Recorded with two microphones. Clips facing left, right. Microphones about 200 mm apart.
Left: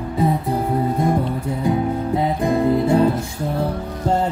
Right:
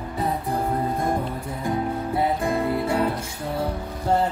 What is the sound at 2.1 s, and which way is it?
Music, 20° left (ahead or behind).